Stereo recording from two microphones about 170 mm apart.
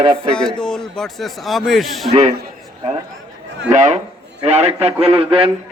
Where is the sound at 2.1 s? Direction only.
40° right (ahead or behind).